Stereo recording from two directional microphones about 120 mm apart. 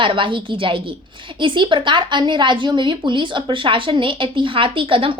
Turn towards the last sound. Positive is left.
turn(degrees=-45)  # may be behind; listen again after turning